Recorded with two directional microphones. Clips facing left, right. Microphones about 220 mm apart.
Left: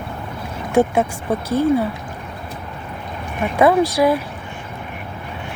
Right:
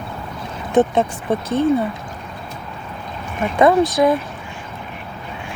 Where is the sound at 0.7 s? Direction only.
10° left (ahead or behind).